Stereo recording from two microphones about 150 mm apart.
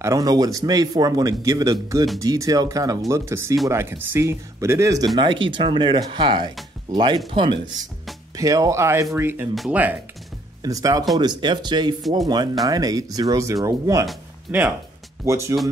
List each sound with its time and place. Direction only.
0.0 s speech: 25° right (ahead or behind)
8.4 s speech: 20° right (ahead or behind)
10.6 s speech: 25° right (ahead or behind)